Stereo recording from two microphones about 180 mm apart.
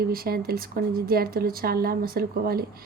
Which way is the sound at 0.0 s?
55° right (ahead or behind).